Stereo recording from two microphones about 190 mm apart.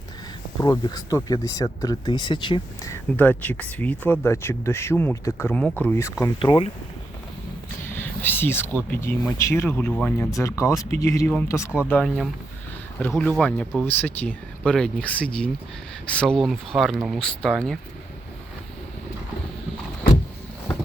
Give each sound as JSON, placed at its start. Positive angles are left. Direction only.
{"t": 0.6, "sound": "speech", "side_deg": 20}
{"t": 6.4, "sound": "speech", "side_deg": 25}
{"t": 7.9, "sound": "speech", "side_deg": 10}